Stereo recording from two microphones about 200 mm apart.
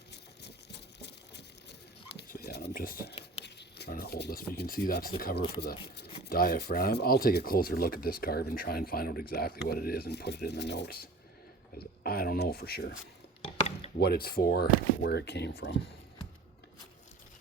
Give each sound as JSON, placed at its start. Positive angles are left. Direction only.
{"t": 0.1, "sound": "a sound", "side_deg": 55}
{"t": 3.4, "sound": "speech", "side_deg": 55}
{"t": 14.0, "sound": "speech", "side_deg": 50}